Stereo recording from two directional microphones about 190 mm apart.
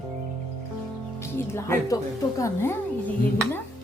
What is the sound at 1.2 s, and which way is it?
Speech, 15° left (ahead or behind).